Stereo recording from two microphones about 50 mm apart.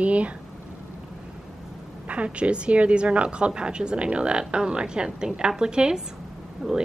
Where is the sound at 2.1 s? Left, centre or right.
Right.